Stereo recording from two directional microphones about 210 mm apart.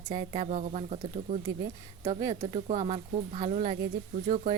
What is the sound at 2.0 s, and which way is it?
Speech, 20° right (ahead or behind).